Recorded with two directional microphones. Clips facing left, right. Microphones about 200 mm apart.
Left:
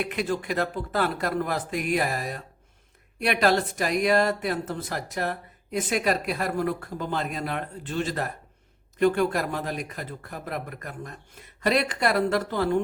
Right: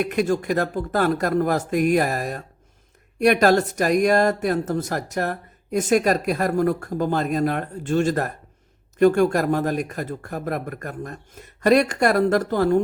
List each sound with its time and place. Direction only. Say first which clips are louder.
0.0 s speech: right 6 dB; 45° right (ahead or behind)